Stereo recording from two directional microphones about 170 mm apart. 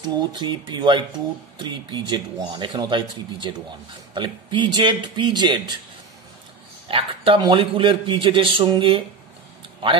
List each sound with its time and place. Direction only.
0.3 s speech: 25° right (ahead or behind)
6.9 s a man's voice: 30° right (ahead or behind)